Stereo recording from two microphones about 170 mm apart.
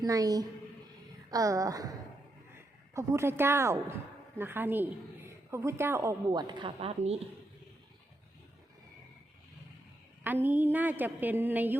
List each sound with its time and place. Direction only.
0.0 s a woman's voice: 20° right (ahead or behind)
10.2 s a woman's voice: 10° right (ahead or behind)